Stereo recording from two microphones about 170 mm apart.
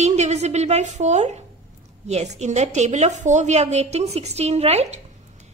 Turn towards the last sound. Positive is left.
turn(degrees=-40)  # may be behind; listen again after turning